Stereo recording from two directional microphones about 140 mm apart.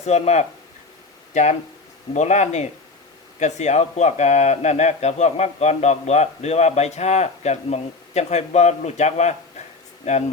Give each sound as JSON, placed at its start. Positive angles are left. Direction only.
{"t": 0.0, "sound": "speech", "side_deg": 50}